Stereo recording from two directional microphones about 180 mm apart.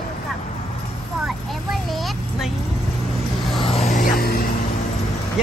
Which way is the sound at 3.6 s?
35° left (ahead or behind).